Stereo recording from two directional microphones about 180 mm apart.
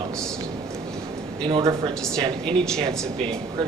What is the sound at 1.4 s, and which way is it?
Speech, 25° right (ahead or behind).